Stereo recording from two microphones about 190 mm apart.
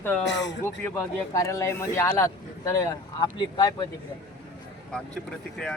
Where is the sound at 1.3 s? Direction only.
15° left (ahead or behind).